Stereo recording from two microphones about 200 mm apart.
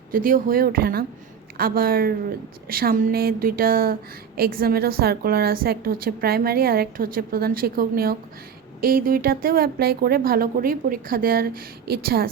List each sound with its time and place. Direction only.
0.1 s a woman's voice: 45° right (ahead or behind)